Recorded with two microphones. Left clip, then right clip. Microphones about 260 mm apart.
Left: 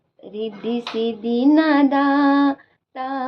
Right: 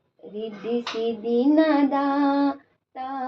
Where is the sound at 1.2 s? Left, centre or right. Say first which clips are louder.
Left 3 dB; left.